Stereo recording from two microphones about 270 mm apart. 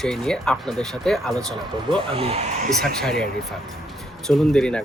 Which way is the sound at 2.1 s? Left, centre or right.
Right.